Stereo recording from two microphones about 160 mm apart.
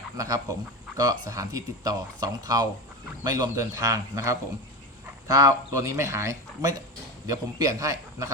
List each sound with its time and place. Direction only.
0.2 s speech: 20° right (ahead or behind)